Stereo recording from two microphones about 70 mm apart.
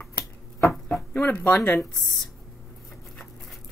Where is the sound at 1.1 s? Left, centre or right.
Left.